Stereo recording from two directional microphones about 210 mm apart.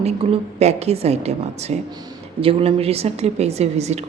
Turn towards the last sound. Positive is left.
turn(degrees=-30)  # may be behind; listen again after turning